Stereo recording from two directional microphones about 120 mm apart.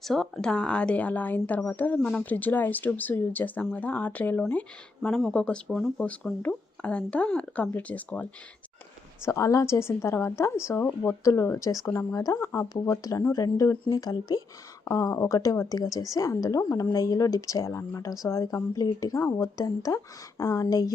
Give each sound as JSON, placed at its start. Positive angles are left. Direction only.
{"t": 0.0, "sound": "speech", "side_deg": 0}
{"t": 9.2, "sound": "a woman's voice", "side_deg": 25}